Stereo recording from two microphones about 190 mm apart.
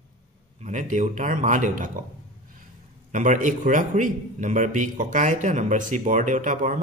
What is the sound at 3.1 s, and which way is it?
A man's voice, 45° right (ahead or behind).